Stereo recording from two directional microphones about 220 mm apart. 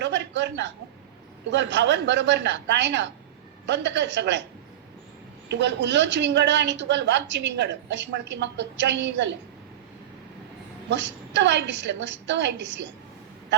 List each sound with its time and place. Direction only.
0.0 s a sound: 50° right (ahead or behind)
1.5 s a woman's voice: 55° right (ahead or behind)
5.5 s a woman's voice: 50° right (ahead or behind)
10.8 s a woman's voice: 55° right (ahead or behind)